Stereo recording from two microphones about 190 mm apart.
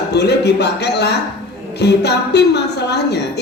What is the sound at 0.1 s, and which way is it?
A man's voice, 60° left (ahead or behind).